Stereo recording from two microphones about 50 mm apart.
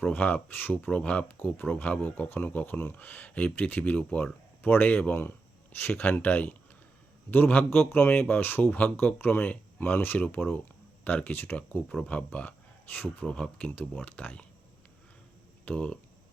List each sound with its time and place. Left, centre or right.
0.0 s a man's voice: left
0.9 s speech: left
1.5 s a man's voice: left
12.0 s speech: left
12.5 s a sound: left
13.2 s speech: centre
13.7 s speech: left
15.7 s speech: left